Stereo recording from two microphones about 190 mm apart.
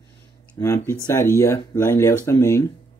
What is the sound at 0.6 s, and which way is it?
Speech, 20° left (ahead or behind).